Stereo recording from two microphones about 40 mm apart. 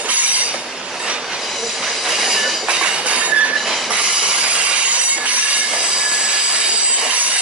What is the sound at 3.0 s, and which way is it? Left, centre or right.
Train, right.